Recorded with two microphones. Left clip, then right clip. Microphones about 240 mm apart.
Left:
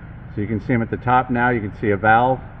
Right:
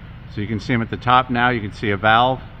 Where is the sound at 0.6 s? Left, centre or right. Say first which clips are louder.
Right 2 dB; right.